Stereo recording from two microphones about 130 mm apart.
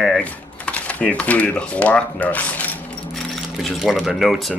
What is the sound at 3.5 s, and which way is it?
Speech, centre (ahead or behind).